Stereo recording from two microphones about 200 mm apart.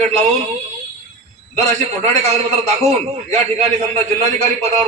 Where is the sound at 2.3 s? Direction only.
30° right (ahead or behind).